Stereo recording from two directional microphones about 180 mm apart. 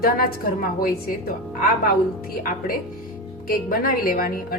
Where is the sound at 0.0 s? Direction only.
55° left (ahead or behind).